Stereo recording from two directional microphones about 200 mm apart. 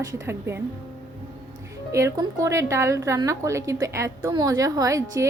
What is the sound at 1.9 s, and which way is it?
Speech, 15° right (ahead or behind).